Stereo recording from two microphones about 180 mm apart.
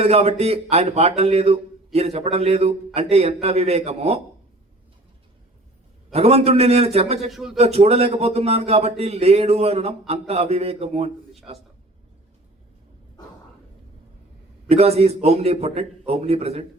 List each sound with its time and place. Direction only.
0.0 s speech: 35° right (ahead or behind)
6.1 s speech: 35° right (ahead or behind)
7.3 s a man's voice: centre (ahead or behind)
7.5 s speech: 35° right (ahead or behind)
14.7 s speech: 35° right (ahead or behind)